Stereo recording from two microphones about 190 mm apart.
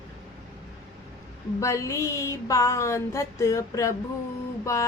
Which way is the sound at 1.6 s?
15° left (ahead or behind).